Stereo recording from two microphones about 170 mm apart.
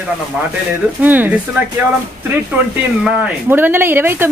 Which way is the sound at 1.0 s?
10° right (ahead or behind).